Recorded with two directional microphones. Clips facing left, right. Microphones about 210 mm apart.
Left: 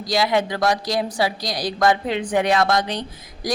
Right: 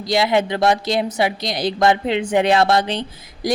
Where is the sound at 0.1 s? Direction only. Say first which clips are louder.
Right 3 dB; 25° right (ahead or behind).